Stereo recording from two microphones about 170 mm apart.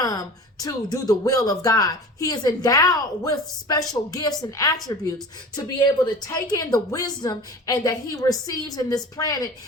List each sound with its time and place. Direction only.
0.0 s speech: 20° left (ahead or behind)
6.2 s speech: 20° left (ahead or behind)